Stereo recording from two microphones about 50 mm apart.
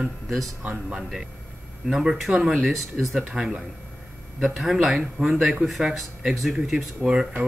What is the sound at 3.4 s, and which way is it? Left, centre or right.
Speech, centre.